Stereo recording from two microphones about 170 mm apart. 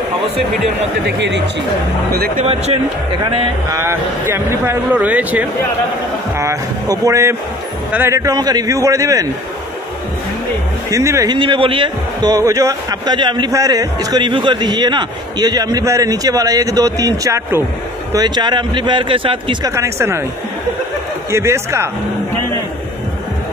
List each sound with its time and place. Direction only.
1.0 s speech: 90° right
2.1 s speech: 65° right (ahead or behind)
2.4 s speech: 35° right (ahead or behind)
3.7 s a man's voice: 15° right (ahead or behind)
10.9 s a man's voice: 20° right (ahead or behind)
11.3 s a man's voice: 30° right (ahead or behind)
19.7 s speech: 15° right (ahead or behind)
21.3 s speech: 15° right (ahead or behind)